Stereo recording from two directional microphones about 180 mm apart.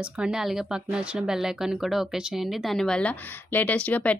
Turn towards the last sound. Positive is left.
turn(degrees=10)  # may be behind; listen again after turning